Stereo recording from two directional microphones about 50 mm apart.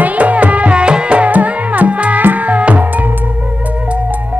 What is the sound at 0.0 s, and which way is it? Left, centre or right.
Music, right.